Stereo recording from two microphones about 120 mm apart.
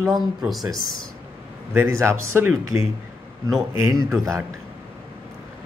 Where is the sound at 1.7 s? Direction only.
20° right (ahead or behind).